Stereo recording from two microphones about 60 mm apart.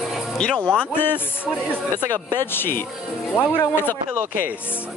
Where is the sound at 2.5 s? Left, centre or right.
Left.